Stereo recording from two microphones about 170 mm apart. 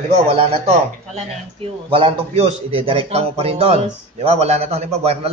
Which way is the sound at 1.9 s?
30° right (ahead or behind).